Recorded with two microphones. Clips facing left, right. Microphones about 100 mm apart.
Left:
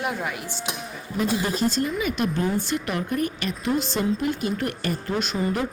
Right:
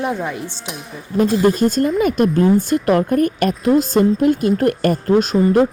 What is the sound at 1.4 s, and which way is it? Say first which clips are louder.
Speech: right 9 dB; 50° right (ahead or behind).